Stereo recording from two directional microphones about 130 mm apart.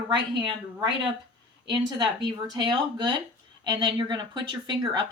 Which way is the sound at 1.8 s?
35° right (ahead or behind).